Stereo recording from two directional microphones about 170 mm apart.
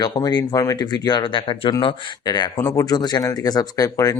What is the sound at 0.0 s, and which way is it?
Speech, 25° left (ahead or behind).